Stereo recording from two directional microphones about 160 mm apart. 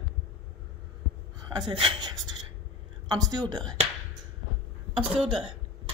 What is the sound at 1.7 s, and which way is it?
Speech, 30° right (ahead or behind).